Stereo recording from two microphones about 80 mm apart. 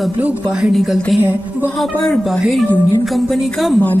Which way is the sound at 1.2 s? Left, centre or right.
Right.